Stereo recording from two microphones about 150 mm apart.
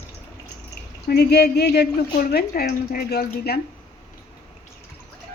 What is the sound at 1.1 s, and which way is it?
Speech, 90° left.